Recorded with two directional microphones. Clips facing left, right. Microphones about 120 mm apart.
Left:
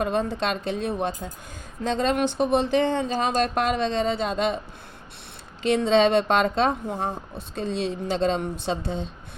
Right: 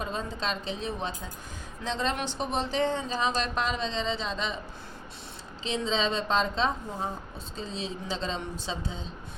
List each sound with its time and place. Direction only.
0.0 s speech: 65° left (ahead or behind)
5.6 s speech: 60° left (ahead or behind)